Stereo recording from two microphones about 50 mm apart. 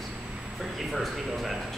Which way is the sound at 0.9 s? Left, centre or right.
Centre.